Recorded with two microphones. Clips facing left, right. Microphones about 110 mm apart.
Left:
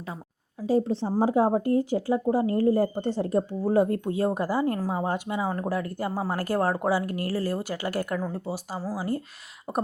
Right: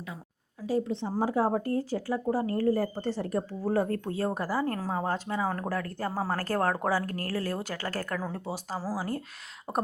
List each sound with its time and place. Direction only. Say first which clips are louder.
0.7 s a woman's voice: left 5 dB; 35° left (ahead or behind)
1.2 s speech: left 4 dB; 20° left (ahead or behind); by 8.8 s 5° left (ahead or behind)
8.8 s speech: left 5 dB; 5° right (ahead or behind)